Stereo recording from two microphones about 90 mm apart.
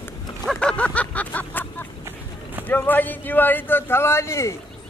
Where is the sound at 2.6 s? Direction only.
20° left (ahead or behind).